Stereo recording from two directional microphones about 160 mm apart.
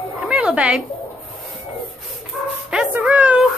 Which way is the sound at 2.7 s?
5° right (ahead or behind).